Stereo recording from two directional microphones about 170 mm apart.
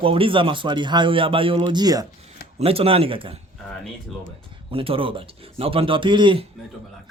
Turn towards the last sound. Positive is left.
turn(degrees=-30)  # may be behind; listen again after turning